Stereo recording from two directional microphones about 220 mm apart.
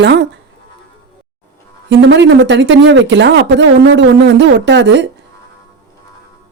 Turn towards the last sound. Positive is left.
turn(degrees=-55)  # may be behind; listen again after turning